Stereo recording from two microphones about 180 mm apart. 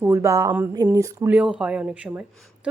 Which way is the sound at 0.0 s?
15° right (ahead or behind).